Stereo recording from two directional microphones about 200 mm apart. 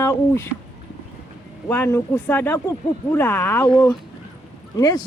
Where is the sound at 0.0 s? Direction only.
15° left (ahead or behind).